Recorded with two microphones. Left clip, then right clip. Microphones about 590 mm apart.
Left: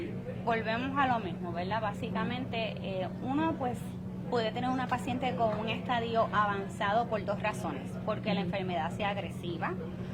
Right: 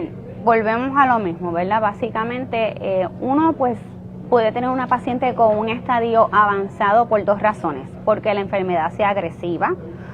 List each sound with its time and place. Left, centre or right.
0.4 s a woman's voice: right